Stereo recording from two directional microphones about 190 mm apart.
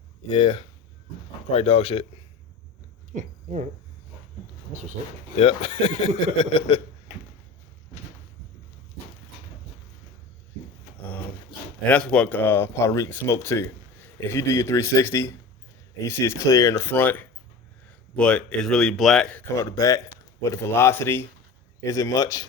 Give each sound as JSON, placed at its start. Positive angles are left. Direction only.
{"t": 0.3, "sound": "speech", "side_deg": 25}
{"t": 3.2, "sound": "speech", "side_deg": -40}
{"t": 5.4, "sound": "speech", "side_deg": 30}
{"t": 11.9, "sound": "speech", "side_deg": 5}